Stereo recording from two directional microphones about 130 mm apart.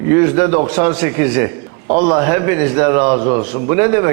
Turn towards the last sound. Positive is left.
turn(degrees=-20)  # may be behind; listen again after turning